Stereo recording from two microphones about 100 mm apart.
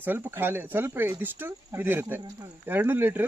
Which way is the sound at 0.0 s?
20° right (ahead or behind).